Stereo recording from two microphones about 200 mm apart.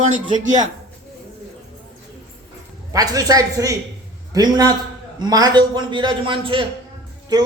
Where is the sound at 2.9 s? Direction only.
15° right (ahead or behind).